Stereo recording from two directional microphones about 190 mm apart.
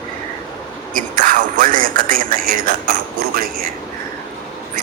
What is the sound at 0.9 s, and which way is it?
A man's voice, 45° right (ahead or behind).